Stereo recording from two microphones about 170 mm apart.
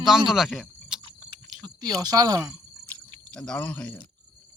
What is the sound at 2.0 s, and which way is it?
Speech, 20° right (ahead or behind).